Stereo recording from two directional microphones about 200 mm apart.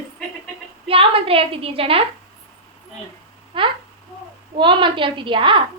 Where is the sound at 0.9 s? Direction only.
25° right (ahead or behind).